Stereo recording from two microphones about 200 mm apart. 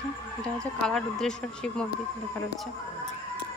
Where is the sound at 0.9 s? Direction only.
5° left (ahead or behind).